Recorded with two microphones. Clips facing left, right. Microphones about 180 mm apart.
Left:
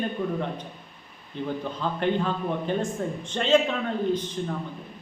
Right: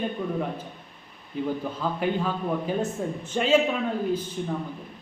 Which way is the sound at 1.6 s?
5° right (ahead or behind).